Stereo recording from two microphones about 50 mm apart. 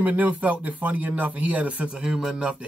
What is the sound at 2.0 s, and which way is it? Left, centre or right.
Speech, centre.